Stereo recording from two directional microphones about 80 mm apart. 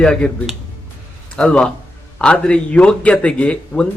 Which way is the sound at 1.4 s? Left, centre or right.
Centre.